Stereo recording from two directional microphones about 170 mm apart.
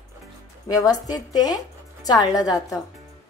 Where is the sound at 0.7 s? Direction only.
20° left (ahead or behind).